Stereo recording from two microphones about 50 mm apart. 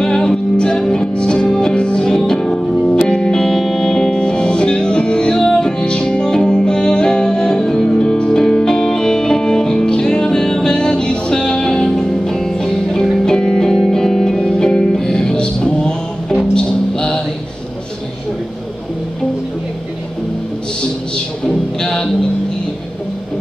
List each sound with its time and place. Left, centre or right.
0.0 s music: centre
21.5 s music: centre